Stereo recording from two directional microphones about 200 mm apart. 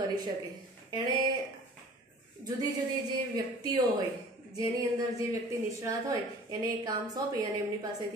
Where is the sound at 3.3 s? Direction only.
20° right (ahead or behind).